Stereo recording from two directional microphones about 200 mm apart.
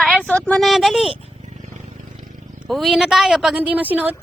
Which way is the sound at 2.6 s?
Centre (ahead or behind).